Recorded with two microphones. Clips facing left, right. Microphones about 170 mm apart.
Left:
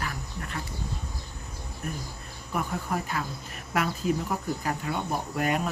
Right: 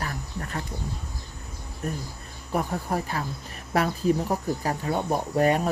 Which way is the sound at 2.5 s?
40° right (ahead or behind).